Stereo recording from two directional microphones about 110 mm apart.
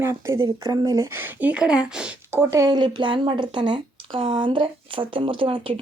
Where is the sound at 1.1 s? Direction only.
15° right (ahead or behind).